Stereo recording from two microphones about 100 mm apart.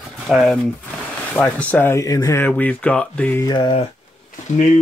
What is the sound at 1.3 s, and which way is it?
Speech, 15° left (ahead or behind).